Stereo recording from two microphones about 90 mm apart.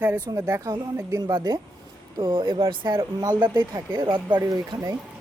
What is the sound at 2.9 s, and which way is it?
Speech, 50° right (ahead or behind).